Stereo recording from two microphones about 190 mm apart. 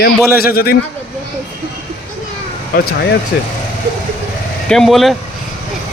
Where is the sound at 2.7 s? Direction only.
50° left (ahead or behind).